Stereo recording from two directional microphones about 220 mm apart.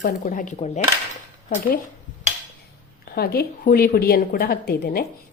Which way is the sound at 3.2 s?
45° left (ahead or behind).